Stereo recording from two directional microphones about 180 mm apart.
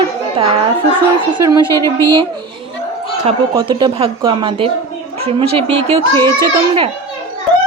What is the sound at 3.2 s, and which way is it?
A woman's voice, 30° right (ahead or behind).